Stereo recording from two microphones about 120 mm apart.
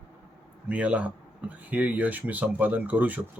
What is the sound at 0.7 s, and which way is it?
Speech, 10° right (ahead or behind).